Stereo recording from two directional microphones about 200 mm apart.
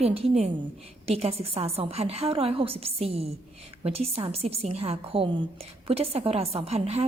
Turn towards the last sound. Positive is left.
turn(degrees=-30)  # may be behind; listen again after turning